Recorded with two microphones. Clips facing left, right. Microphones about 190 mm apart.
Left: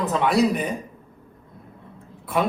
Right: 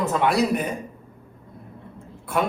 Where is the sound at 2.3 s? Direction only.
Centre (ahead or behind).